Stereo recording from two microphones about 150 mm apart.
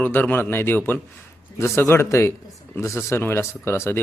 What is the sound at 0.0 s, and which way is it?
Speech, 10° left (ahead or behind).